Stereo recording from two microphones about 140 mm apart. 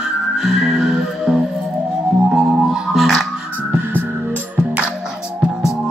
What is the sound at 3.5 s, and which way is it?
Music, 15° right (ahead or behind).